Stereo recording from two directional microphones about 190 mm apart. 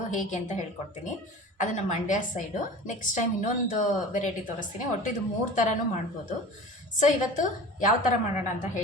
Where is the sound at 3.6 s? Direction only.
40° left (ahead or behind).